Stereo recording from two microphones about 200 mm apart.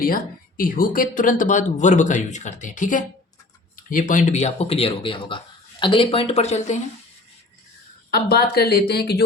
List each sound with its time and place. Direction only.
0.0 s speech: 45° left (ahead or behind)
8.1 s speech: 50° left (ahead or behind)